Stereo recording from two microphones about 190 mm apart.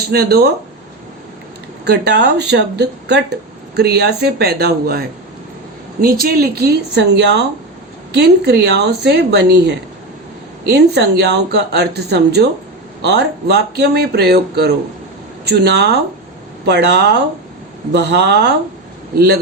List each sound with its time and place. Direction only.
0.1 s a woman's voice: 55° right (ahead or behind)
1.8 s a woman's voice: 60° right (ahead or behind)